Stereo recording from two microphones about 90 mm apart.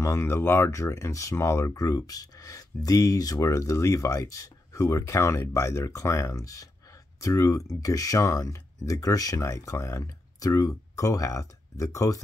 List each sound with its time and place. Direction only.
0.0 s speech: 30° left (ahead or behind)